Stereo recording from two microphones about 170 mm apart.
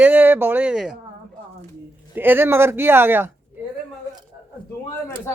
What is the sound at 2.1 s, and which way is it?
Speech, 10° right (ahead or behind).